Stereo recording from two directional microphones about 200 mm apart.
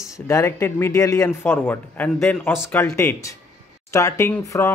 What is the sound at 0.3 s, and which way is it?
Speech, 15° left (ahead or behind).